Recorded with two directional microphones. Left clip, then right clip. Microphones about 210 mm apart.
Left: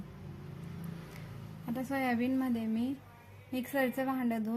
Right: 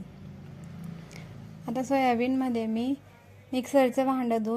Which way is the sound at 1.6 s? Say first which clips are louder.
Right 9 dB; 30° right (ahead or behind).